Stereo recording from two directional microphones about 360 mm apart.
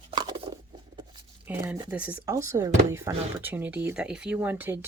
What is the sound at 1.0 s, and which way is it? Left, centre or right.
Speech, centre.